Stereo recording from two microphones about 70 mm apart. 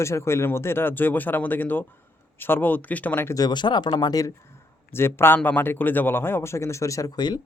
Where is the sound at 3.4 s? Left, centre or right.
Left.